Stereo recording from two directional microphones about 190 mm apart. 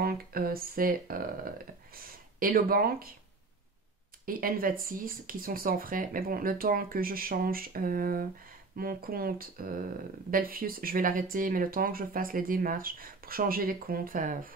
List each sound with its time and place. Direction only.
0.0 s speech: 50° right (ahead or behind)
4.3 s speech: 50° right (ahead or behind)